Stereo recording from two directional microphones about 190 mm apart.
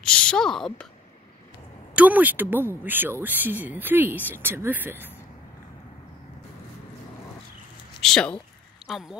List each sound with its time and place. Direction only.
0.0 s a woman's voice: 5° left (ahead or behind)
2.0 s speech: 10° right (ahead or behind)
8.0 s speech: 5° left (ahead or behind)